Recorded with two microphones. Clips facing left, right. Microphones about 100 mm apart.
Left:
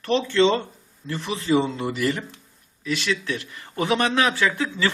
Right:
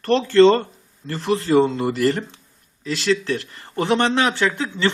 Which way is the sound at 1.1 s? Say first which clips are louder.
Right 9 dB; centre (ahead or behind).